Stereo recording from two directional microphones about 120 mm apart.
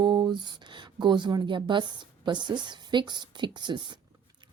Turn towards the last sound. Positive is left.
turn(degrees=-40)  # may be behind; listen again after turning